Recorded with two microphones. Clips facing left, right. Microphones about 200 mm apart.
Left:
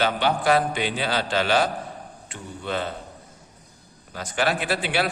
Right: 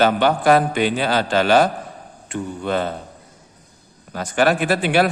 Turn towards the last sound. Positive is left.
turn(degrees=-50)  # may be behind; listen again after turning